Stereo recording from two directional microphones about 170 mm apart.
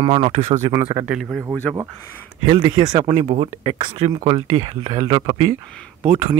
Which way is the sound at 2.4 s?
30° right (ahead or behind).